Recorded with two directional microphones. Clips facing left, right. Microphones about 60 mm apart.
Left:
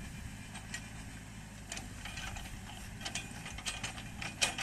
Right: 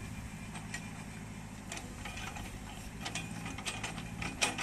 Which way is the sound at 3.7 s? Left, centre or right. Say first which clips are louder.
Right 2 dB; right.